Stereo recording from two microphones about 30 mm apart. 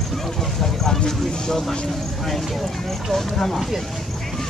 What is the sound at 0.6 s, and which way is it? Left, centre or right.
Speech, centre.